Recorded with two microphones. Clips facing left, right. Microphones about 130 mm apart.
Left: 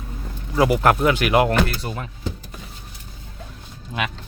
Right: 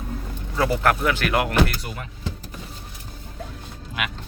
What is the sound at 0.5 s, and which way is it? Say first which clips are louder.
Speech: left 4 dB; 15° left (ahead or behind).